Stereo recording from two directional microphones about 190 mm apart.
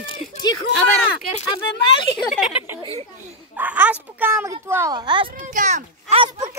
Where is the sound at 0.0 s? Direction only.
20° left (ahead or behind).